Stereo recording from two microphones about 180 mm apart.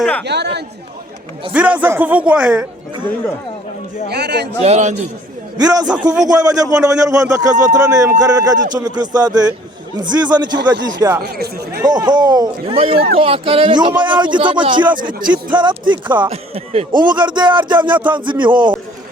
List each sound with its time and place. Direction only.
0.0 s speech: 5° left (ahead or behind)
0.3 s speech: 70° right (ahead or behind)
1.5 s speech: 10° right (ahead or behind)
4.1 s speech: 65° right (ahead or behind)
4.6 s speech: 40° right (ahead or behind)
5.5 s speech: 20° right (ahead or behind)
11.2 s chatter: 60° right (ahead or behind)
11.9 s speech: 25° right (ahead or behind)